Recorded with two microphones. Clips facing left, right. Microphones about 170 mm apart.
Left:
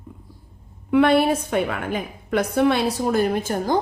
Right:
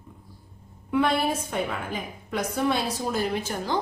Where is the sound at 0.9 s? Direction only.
65° left (ahead or behind).